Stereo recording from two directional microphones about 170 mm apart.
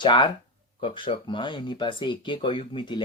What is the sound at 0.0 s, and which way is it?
Speech, 30° left (ahead or behind).